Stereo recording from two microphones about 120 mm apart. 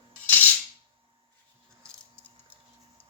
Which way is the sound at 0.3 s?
15° left (ahead or behind).